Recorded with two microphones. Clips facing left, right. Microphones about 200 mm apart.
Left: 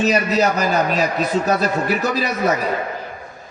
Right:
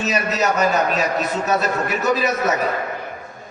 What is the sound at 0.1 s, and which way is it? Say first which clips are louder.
A man's voice: left 3 dB; 35° left (ahead or behind).